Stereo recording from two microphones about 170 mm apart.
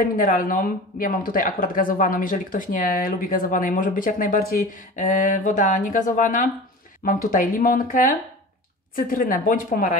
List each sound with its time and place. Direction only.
0.1 s speech: 55° left (ahead or behind)